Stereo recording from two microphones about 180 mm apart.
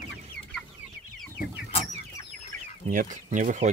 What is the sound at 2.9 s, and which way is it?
Speech, 45° right (ahead or behind).